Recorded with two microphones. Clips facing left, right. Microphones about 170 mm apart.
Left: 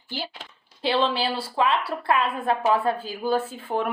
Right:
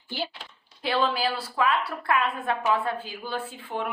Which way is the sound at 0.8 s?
30° left (ahead or behind).